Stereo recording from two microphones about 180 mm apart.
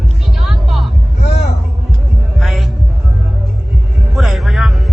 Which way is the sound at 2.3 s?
Centre (ahead or behind).